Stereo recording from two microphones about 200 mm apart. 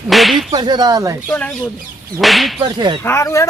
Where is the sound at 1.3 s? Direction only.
5° left (ahead or behind).